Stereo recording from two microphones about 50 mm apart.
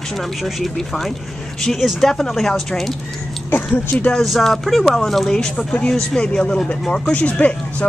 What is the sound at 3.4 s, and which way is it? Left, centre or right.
Speech, left.